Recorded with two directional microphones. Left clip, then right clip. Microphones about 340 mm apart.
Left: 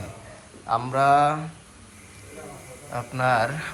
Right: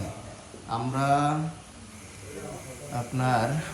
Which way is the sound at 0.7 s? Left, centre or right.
Centre.